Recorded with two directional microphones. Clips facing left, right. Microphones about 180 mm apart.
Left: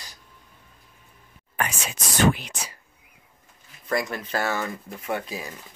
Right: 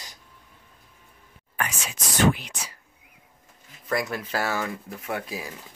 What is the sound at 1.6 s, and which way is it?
Speech, 25° left (ahead or behind).